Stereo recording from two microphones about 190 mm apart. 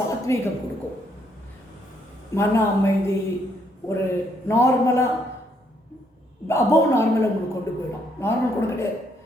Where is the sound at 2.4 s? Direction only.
15° left (ahead or behind).